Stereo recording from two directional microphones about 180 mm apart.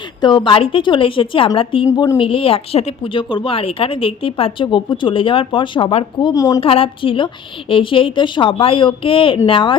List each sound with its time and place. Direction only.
0.2 s a woman's voice: 25° left (ahead or behind)
6.6 s a woman's voice: 30° left (ahead or behind)